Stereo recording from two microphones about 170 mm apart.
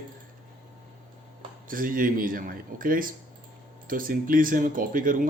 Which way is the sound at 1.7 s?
55° right (ahead or behind).